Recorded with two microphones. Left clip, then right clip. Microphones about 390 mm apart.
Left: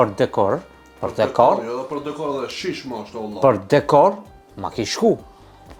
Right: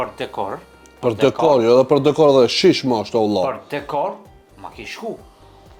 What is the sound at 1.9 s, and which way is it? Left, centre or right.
Speech, right.